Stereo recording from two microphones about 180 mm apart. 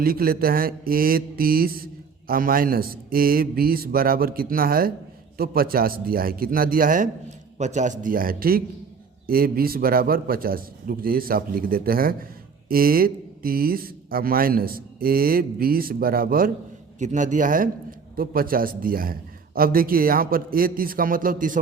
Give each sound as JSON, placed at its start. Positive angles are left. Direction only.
{"t": 0.0, "sound": "mantra", "side_deg": -55}
{"t": 7.6, "sound": "a man's voice", "side_deg": -40}
{"t": 9.2, "sound": "mantra", "side_deg": -55}
{"t": 17.0, "sound": "a man's voice", "side_deg": -40}